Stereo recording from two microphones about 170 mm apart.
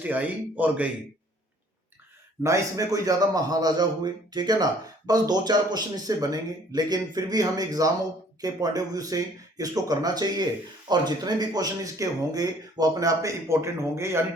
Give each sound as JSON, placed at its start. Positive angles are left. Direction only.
{"t": 0.0, "sound": "speech", "side_deg": -10}
{"t": 2.4, "sound": "speech", "side_deg": -20}